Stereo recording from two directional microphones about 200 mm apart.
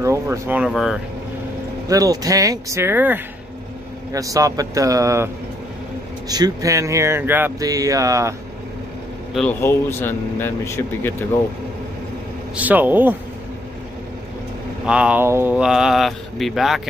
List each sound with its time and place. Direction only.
0.0 s speech: 15° right (ahead or behind)
1.9 s speech: 15° right (ahead or behind)
9.3 s speech: 5° left (ahead or behind)
12.5 s speech: 10° right (ahead or behind)
14.9 s speech: 5° right (ahead or behind)